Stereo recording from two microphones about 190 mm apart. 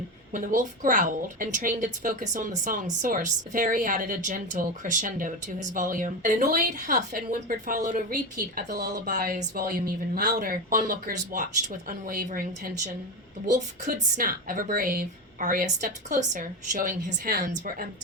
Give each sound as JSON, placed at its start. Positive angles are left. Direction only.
{"t": 0.3, "sound": "a woman's voice", "side_deg": -45}